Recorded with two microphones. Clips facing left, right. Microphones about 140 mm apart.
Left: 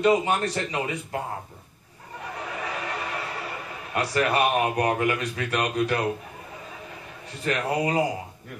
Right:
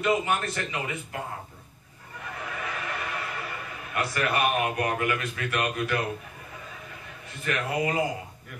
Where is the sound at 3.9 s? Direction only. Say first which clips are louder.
Left 4 dB; 30° left (ahead or behind).